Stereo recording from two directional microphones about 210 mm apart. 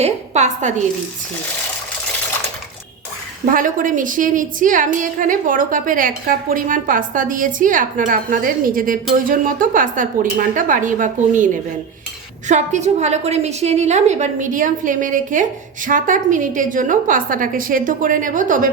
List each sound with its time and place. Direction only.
0.0 s a woman's voice: 35° right (ahead or behind)
3.5 s a woman's voice: 40° right (ahead or behind)
12.5 s a woman's voice: 35° right (ahead or behind)